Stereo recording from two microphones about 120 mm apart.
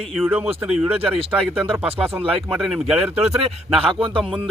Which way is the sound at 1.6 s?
15° right (ahead or behind).